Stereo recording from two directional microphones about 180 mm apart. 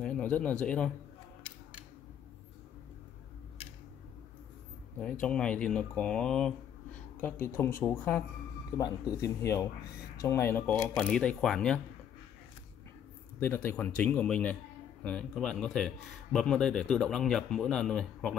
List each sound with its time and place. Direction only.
0.0 s a sound: 5° left (ahead or behind)
0.7 s speech: 5° left (ahead or behind)
5.2 s speech: 5° left (ahead or behind)
13.4 s speech: 10° left (ahead or behind)